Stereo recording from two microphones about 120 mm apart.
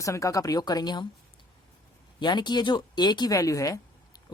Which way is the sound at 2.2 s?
40° left (ahead or behind).